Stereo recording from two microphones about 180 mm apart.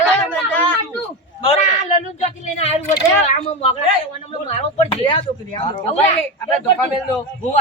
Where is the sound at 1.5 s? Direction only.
35° left (ahead or behind).